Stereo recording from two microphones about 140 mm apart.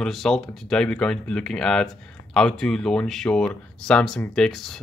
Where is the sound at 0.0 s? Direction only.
Centre (ahead or behind).